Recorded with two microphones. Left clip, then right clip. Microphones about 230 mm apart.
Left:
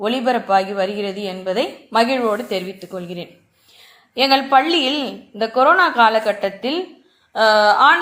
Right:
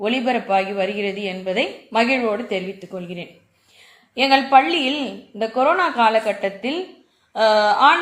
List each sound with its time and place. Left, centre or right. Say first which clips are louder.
0.0 s speech: left 2 dB; left